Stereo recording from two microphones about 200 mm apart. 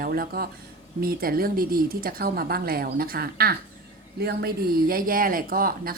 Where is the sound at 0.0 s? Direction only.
50° right (ahead or behind).